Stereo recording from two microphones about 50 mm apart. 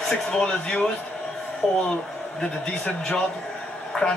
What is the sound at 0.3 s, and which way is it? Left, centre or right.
A woman's voice, centre.